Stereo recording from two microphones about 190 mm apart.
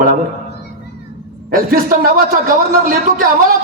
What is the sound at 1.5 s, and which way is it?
A man's voice, 50° right (ahead or behind).